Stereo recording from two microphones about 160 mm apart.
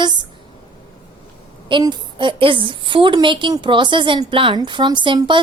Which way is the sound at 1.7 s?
30° right (ahead or behind).